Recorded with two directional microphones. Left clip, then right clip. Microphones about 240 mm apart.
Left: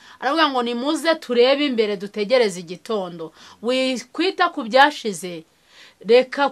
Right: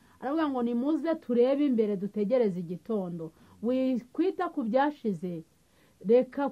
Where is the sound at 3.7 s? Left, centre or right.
Centre.